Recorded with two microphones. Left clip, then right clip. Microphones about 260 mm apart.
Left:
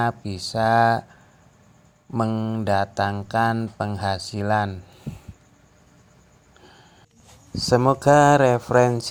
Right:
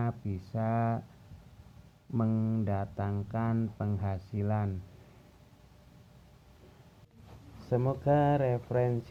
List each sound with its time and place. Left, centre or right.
0.0 s speech: left
2.1 s speech: left
7.7 s speech: left